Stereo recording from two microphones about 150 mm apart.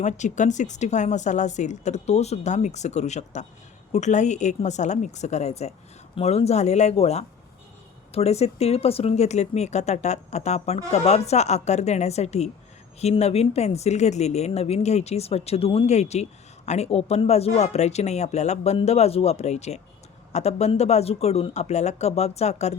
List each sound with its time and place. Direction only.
0.0 s speech: 55° left (ahead or behind)